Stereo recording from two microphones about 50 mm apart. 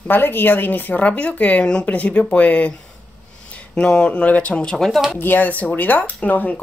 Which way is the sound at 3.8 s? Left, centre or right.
Centre.